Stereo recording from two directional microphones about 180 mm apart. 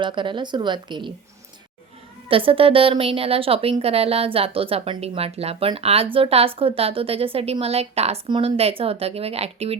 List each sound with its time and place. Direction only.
0.0 s speech: 25° right (ahead or behind)
2.3 s a woman's voice: 30° right (ahead or behind)